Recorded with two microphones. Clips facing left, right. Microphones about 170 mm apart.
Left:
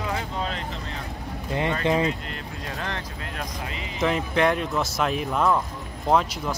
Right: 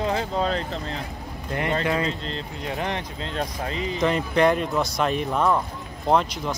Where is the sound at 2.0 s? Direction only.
30° right (ahead or behind).